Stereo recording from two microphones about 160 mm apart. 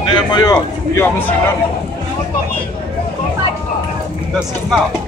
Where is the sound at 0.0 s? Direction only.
25° left (ahead or behind).